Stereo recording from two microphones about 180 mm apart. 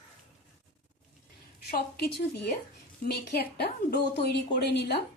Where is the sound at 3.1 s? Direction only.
65° left (ahead or behind).